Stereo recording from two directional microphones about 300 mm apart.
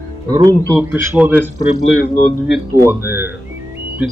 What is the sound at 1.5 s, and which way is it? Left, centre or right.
Speech, left.